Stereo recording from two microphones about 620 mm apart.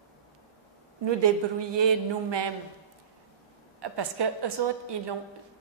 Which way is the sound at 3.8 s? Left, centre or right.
Right.